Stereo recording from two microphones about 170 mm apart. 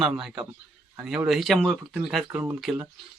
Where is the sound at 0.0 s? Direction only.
5° right (ahead or behind).